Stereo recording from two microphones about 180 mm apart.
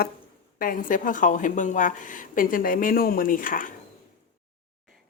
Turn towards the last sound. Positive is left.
turn(degrees=50)  # may be behind; listen again after turning